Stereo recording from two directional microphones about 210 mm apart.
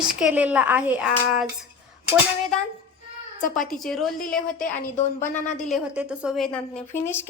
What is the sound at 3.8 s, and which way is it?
Speech, centre (ahead or behind).